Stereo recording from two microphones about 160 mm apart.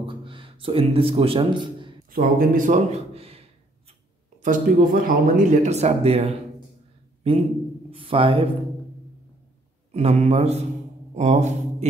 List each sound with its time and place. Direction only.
0.0 s speech: 30° right (ahead or behind)
2.0 s a man's voice: 60° right (ahead or behind); by 3.4 s 40° right (ahead or behind)
4.4 s a man's voice: 55° right (ahead or behind); by 8.5 s 35° right (ahead or behind)
9.9 s a man's voice: 40° right (ahead or behind)